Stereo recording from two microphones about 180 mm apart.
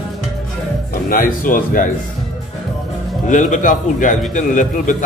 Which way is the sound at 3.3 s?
45° left (ahead or behind).